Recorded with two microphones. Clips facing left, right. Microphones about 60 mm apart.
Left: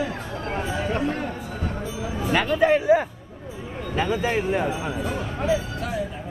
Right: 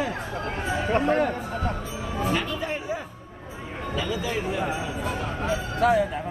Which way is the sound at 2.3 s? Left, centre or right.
Left.